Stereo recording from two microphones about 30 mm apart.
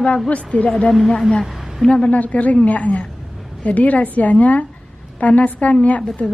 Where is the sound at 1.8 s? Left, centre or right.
Left.